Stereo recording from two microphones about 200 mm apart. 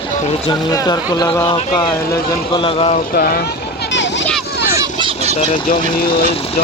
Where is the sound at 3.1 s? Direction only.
50° left (ahead or behind).